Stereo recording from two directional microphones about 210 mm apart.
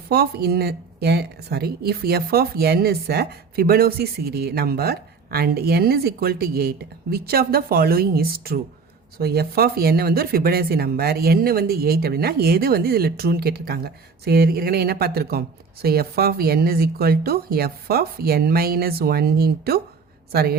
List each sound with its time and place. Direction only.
0.1 s speech: 50° right (ahead or behind)